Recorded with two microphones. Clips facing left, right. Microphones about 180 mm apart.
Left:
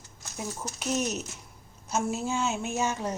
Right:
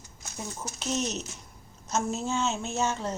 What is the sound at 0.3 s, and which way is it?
Speech, 10° left (ahead or behind).